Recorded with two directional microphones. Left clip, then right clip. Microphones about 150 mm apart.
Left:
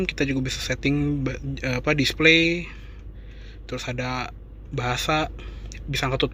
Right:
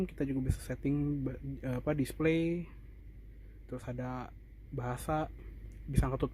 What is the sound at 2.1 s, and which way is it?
Speech, 25° right (ahead or behind).